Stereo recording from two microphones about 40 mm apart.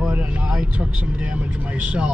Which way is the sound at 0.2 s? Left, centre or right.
Right.